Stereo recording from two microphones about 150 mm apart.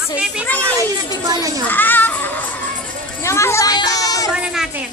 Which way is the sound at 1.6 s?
10° left (ahead or behind).